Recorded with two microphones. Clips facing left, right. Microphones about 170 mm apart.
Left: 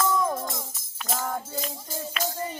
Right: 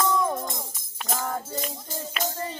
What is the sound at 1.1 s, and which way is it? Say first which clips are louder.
Music: even; centre (ahead or behind).